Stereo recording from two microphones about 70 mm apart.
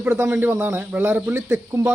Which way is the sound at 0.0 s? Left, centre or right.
Right.